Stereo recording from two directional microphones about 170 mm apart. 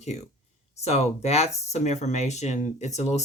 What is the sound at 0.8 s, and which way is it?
Speech, 40° left (ahead or behind).